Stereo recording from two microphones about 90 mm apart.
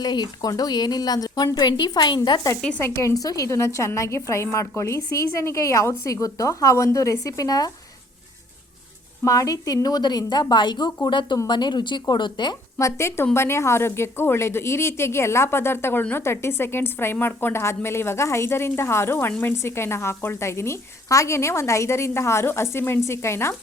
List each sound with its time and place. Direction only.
0.0 s a woman's voice: 50° left (ahead or behind)
2.6 s speech: 10° left (ahead or behind)
2.8 s a woman's voice: 35° left (ahead or behind)
9.2 s a woman's voice: 40° left (ahead or behind); by 12.5 s 55° left (ahead or behind)
12.8 s a woman's voice: 30° left (ahead or behind)